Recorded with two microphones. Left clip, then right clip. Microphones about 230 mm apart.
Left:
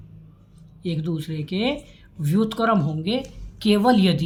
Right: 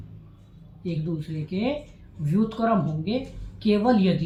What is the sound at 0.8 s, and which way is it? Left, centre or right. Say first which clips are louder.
A man's voice: left 3 dB; left.